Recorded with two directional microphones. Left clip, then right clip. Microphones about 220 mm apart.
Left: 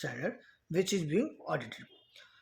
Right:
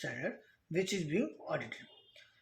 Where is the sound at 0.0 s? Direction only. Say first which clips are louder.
Left 2 dB; 50° left (ahead or behind).